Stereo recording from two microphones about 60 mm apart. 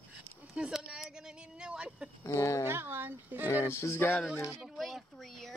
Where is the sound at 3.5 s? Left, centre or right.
Left.